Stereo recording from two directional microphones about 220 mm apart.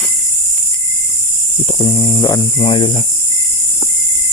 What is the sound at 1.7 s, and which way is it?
Speech, 20° left (ahead or behind).